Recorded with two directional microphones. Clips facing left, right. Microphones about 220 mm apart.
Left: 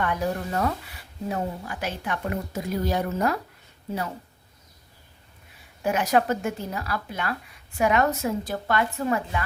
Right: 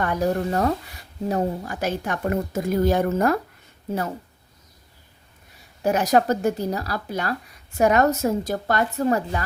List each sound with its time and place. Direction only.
0.0 s a woman's voice: 40° right (ahead or behind)
5.8 s speech: 40° right (ahead or behind)